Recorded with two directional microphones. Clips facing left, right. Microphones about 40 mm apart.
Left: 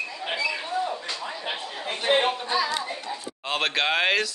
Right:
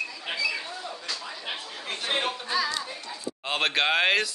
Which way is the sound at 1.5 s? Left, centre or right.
Left.